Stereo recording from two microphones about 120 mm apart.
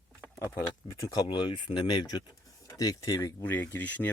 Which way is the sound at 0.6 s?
30° left (ahead or behind).